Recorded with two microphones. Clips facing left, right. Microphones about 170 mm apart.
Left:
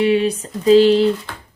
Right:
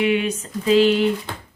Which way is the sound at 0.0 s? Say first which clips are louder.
Left 4 dB; 35° left (ahead or behind).